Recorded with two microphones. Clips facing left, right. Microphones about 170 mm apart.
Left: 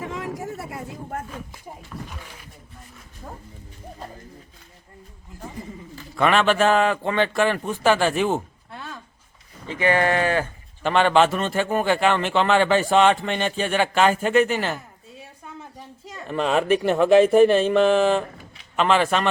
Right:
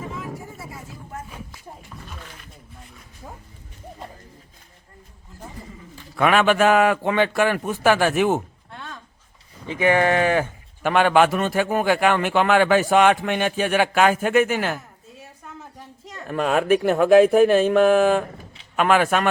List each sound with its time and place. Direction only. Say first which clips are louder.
0.0 s a sound: left 3 dB; 80° left; by 1.2 s 60° left (ahead or behind)
1.9 s speech: left 6 dB; 15° right (ahead or behind)
6.1 s a man's voice: right 1 dB; 5° right (ahead or behind)
8.7 s a sound: left 1 dB; 5° left (ahead or behind)
9.6 s a man's voice: right 2 dB; 15° right (ahead or behind)
16.2 s a man's voice: even; 5° right (ahead or behind)